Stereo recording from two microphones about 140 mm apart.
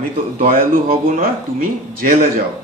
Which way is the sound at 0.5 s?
85° right.